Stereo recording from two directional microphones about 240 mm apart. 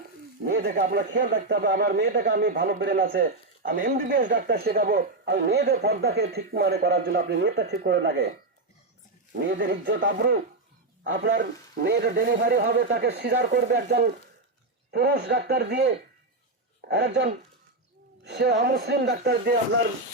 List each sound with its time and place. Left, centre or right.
0.4 s speech: right
9.3 s speech: right